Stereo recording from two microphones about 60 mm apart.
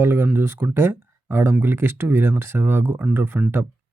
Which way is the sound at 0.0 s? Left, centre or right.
Right.